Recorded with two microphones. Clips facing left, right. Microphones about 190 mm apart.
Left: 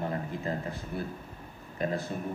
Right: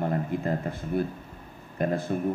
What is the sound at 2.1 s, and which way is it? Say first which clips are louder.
Speech: right 7 dB; 60° right (ahead or behind).